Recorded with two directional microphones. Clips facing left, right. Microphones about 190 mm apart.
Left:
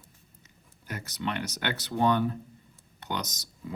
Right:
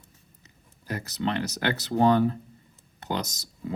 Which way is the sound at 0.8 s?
30° right (ahead or behind).